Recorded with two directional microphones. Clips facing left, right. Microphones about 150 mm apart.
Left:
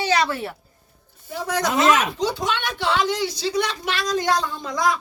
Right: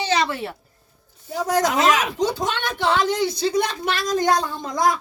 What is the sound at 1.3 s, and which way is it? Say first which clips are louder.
Speech: right 3 dB; 40° right (ahead or behind).